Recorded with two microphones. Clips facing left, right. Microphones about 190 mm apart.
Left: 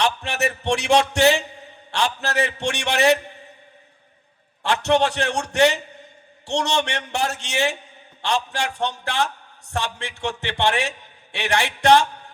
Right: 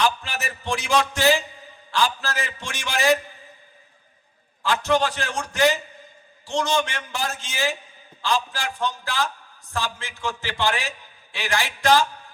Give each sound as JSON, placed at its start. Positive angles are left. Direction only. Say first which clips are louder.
{"t": 0.0, "sound": "a sound", "louder": "left 2 dB", "side_deg": 70}
{"t": 2.6, "sound": "a man's voice", "louder": "left 6 dB", "side_deg": 70}
{"t": 4.6, "sound": "a man's voice", "louder": "left 2 dB", "side_deg": 70}